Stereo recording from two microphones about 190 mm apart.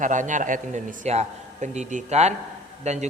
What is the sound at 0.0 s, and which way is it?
A man's voice, 40° right (ahead or behind).